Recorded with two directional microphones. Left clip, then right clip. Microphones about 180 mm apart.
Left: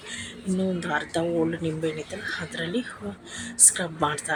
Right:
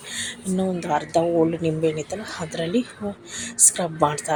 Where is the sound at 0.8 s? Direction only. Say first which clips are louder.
Right 8 dB; 10° right (ahead or behind).